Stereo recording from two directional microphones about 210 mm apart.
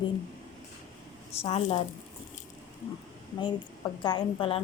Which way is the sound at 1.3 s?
30° left (ahead or behind).